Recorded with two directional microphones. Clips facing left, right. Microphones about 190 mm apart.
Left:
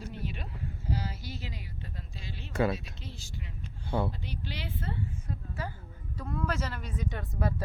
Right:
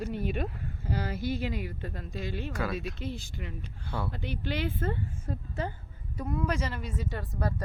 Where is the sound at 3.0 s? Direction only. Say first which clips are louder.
Right 8 dB; 55° right (ahead or behind).